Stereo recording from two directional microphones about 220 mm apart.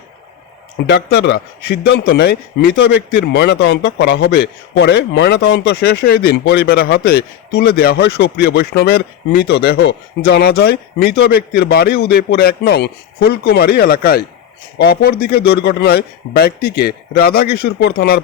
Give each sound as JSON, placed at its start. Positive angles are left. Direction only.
{"t": 0.9, "sound": "a man's voice", "side_deg": 50}